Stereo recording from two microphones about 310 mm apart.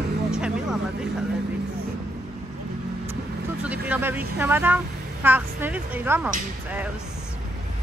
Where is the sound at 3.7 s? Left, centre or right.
Centre.